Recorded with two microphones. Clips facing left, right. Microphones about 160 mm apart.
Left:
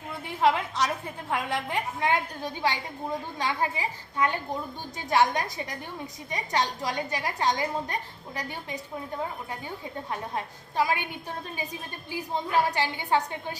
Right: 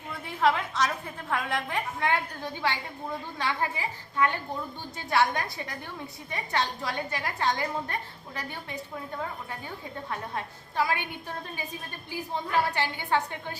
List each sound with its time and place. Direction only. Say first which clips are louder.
1.3 s a woman's voice: left 1 dB; 15° left (ahead or behind)
9.6 s a woman's voice: left 1 dB; 15° left (ahead or behind)
12.1 s a woman's voice: left 2 dB; 15° left (ahead or behind)